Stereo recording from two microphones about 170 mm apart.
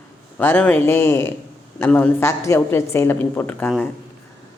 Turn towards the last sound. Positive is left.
turn(degrees=10)  # may be behind; listen again after turning